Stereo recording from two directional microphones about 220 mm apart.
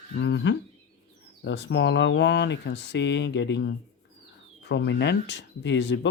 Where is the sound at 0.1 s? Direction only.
50° left (ahead or behind).